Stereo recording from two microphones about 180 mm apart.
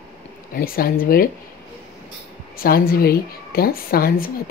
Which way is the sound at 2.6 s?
55° left (ahead or behind).